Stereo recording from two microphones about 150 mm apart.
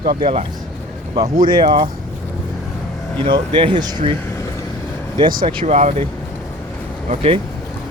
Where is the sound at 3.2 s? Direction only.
35° right (ahead or behind).